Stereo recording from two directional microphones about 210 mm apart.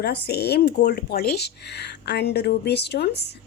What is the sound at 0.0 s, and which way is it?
Speech, 50° left (ahead or behind).